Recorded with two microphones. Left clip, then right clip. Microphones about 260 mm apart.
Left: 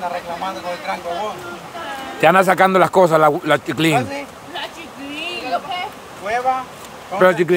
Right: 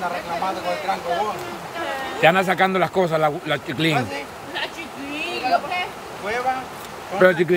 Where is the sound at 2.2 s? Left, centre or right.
Centre.